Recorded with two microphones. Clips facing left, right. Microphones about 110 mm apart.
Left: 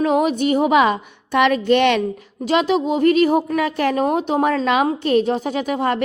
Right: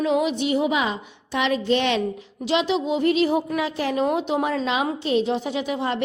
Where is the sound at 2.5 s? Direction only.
50° left (ahead or behind).